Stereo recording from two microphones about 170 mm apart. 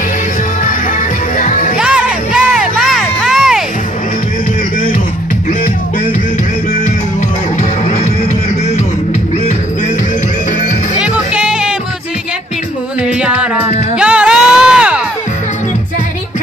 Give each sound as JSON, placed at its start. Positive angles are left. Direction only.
{"t": 1.4, "sound": "music", "side_deg": 45}
{"t": 1.8, "sound": "music", "side_deg": -5}
{"t": 11.0, "sound": "music", "side_deg": -5}
{"t": 13.0, "sound": "music", "side_deg": -5}